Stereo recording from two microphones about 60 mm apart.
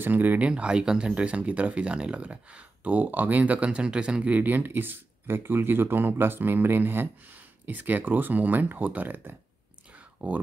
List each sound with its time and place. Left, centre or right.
0.0 s speech: right
0.5 s speech: centre